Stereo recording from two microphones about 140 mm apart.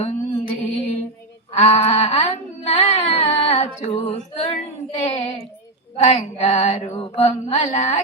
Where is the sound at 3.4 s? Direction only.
50° left (ahead or behind).